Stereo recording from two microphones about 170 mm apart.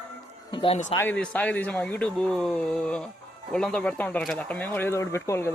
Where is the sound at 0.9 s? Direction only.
10° left (ahead or behind).